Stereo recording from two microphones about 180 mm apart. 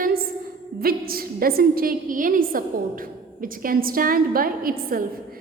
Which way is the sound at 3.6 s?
55° right (ahead or behind).